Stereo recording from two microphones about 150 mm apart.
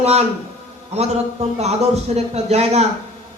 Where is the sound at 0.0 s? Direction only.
45° right (ahead or behind).